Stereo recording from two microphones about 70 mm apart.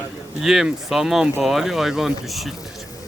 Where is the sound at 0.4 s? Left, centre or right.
Centre.